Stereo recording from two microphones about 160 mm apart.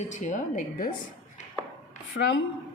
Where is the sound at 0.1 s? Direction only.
55° left (ahead or behind).